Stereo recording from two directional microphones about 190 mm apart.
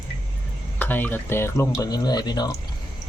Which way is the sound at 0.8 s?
10° left (ahead or behind).